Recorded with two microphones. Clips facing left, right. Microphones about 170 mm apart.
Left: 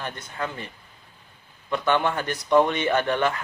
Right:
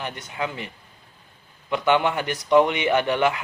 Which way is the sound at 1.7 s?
15° right (ahead or behind).